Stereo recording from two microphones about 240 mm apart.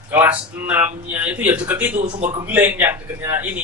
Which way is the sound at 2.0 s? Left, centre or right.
Right.